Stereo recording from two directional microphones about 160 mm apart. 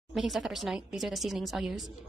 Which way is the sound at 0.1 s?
5° right (ahead or behind).